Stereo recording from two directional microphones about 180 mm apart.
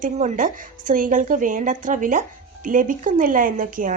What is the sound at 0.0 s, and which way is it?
A woman's voice, 45° right (ahead or behind).